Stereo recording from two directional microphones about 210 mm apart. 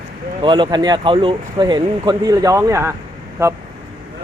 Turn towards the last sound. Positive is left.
turn(degrees=-15)  # may be behind; listen again after turning